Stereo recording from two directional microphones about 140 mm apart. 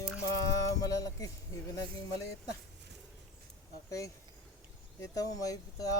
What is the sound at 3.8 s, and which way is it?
Speech, 20° left (ahead or behind).